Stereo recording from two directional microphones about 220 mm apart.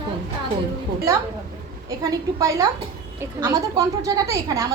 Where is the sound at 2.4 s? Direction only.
15° right (ahead or behind).